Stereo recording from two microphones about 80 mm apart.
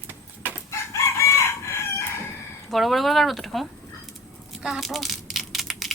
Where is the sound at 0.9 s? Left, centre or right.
Left.